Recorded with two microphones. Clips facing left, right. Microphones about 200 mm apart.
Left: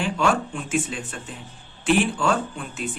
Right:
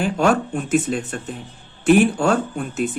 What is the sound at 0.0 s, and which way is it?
Speech, 40° right (ahead or behind).